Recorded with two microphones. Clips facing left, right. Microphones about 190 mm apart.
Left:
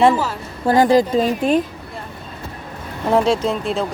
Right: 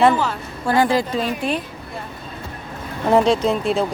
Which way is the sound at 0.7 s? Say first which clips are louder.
Left 4 dB; 40° left (ahead or behind).